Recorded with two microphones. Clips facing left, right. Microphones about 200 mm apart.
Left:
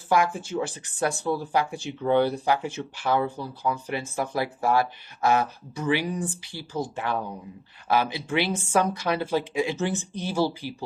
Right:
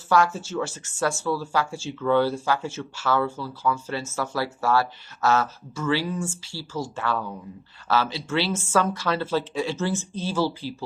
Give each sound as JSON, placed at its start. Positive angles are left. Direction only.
{"t": 0.3, "sound": "speech", "side_deg": 15}